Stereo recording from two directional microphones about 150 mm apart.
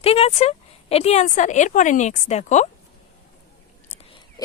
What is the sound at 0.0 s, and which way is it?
Speech, 40° left (ahead or behind).